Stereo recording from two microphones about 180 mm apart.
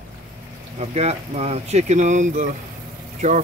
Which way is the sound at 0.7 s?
35° right (ahead or behind).